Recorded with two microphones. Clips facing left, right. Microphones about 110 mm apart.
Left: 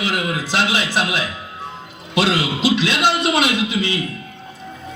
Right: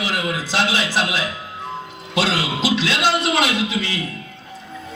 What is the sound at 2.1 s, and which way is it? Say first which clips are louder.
A man's voice: left 2 dB; 15° left (ahead or behind).